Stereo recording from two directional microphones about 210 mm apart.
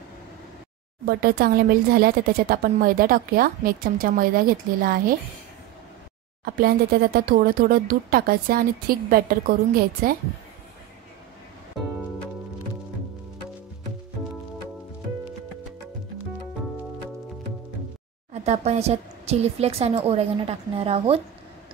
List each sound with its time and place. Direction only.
1.0 s speech: 45° right (ahead or behind)
6.4 s speech: 45° right (ahead or behind)
18.3 s a woman's voice: 30° right (ahead or behind)